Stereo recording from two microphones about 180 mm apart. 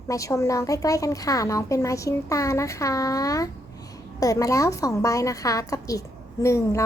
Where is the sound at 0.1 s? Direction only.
20° left (ahead or behind).